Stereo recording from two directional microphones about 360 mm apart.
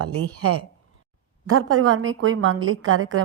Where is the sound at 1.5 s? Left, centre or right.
Right.